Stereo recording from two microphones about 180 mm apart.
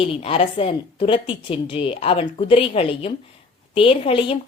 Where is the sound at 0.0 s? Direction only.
30° left (ahead or behind).